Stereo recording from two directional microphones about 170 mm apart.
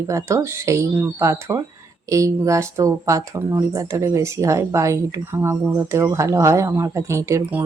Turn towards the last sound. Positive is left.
turn(degrees=-15)  # may be behind; listen again after turning